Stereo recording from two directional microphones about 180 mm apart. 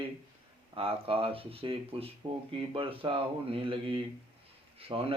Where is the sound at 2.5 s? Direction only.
30° right (ahead or behind).